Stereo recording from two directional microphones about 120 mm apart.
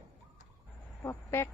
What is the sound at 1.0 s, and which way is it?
Speech, 20° left (ahead or behind).